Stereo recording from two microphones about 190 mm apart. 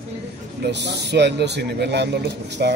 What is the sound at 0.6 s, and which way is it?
Speech, 65° right (ahead or behind).